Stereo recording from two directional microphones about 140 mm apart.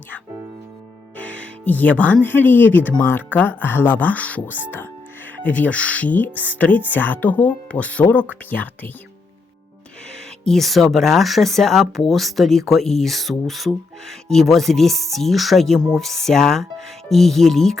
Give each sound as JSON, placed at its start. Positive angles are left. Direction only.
{"t": 1.1, "sound": "speech", "side_deg": 10}
{"t": 10.4, "sound": "speech", "side_deg": 0}